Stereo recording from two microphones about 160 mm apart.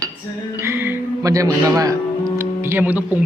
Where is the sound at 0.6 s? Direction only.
15° right (ahead or behind).